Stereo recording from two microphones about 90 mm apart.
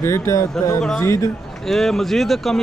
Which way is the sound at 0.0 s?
30° left (ahead or behind).